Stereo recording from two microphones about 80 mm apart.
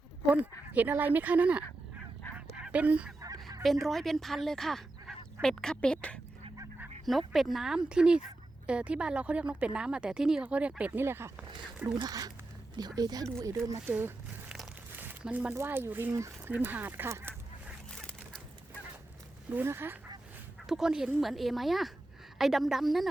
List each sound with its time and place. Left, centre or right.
0.7 s speech: right
2.6 s goose: centre
3.6 s speech: centre
7.0 s a woman's voice: centre
11.0 s speech: right
12.0 s speech: right
15.2 s speech: centre
15.5 s speech: right
19.5 s speech: right
20.7 s a woman's voice: centre